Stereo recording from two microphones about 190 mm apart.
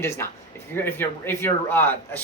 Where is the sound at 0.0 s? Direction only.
15° left (ahead or behind).